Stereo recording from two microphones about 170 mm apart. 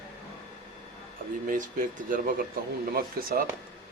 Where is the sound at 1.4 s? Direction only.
50° right (ahead or behind).